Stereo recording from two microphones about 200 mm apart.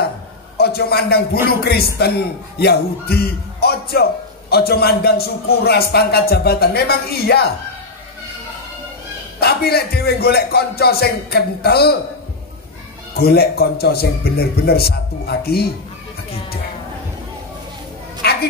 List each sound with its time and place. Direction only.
0.6 s a man's voice: 50° left (ahead or behind)
9.4 s a man's voice: 50° left (ahead or behind)
13.1 s a man's voice: 50° left (ahead or behind)
18.2 s bow-wow: 50° left (ahead or behind)